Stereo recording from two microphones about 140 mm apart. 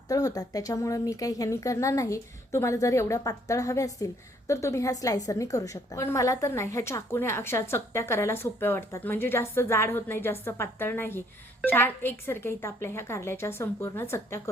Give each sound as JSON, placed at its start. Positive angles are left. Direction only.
{"t": 0.1, "sound": "speech", "side_deg": 25}